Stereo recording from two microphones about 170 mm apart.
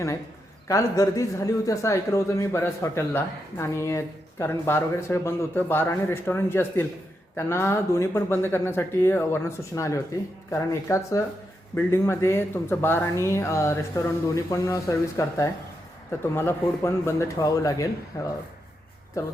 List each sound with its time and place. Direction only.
0.7 s a man's voice: 20° left (ahead or behind)